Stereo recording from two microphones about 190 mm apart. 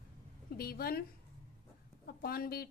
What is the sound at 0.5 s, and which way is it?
Speech, 55° left (ahead or behind).